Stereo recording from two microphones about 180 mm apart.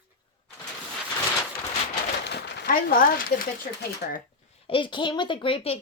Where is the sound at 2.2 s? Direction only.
65° left (ahead or behind); by 3.2 s 50° left (ahead or behind).